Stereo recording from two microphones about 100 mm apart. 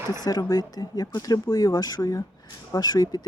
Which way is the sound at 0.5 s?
40° left (ahead or behind).